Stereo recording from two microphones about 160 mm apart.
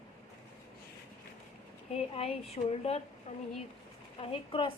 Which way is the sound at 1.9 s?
40° left (ahead or behind).